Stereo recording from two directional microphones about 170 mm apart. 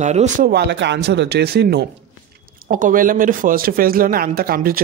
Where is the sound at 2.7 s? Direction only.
50° right (ahead or behind).